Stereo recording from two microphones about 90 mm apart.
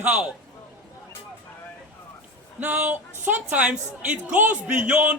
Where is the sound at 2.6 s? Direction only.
20° right (ahead or behind).